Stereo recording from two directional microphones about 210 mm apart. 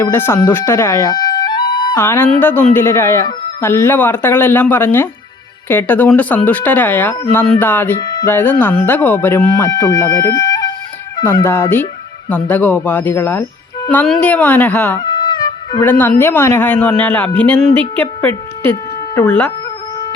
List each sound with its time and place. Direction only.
0.0 s speech: 10° left (ahead or behind)
14.9 s music: 20° left (ahead or behind)
15.9 s a woman's voice: 10° left (ahead or behind)